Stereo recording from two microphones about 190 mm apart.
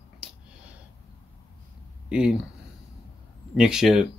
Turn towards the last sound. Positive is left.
turn(degrees=-5)  # may be behind; listen again after turning